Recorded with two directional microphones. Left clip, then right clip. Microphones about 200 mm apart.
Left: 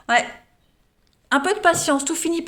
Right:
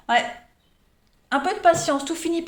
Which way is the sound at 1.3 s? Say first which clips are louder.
Left 1 dB; 45° left (ahead or behind).